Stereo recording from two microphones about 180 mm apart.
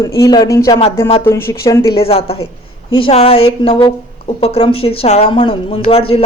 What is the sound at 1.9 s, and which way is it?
A woman's voice, 30° left (ahead or behind).